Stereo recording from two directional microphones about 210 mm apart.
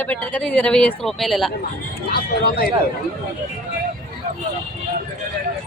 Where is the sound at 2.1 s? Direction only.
45° left (ahead or behind).